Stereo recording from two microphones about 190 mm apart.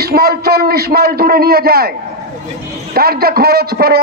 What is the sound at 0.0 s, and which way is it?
A man's voice, 55° right (ahead or behind).